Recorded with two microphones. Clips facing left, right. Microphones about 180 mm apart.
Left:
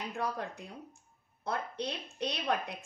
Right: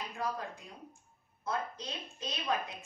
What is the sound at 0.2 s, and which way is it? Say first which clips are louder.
A woman's voice: left 1 dB; 65° left (ahead or behind).